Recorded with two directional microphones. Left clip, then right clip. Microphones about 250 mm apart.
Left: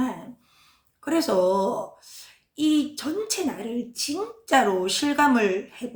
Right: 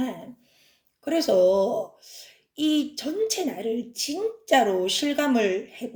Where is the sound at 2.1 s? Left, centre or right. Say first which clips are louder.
Left 1 dB; left.